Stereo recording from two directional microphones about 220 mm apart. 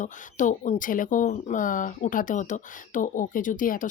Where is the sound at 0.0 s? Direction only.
35° left (ahead or behind).